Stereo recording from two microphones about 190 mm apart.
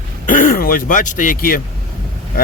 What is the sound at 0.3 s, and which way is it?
Speech, 45° left (ahead or behind).